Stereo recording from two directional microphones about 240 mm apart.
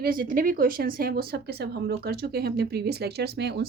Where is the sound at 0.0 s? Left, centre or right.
Right.